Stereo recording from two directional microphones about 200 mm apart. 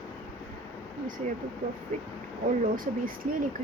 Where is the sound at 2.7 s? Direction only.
45° right (ahead or behind).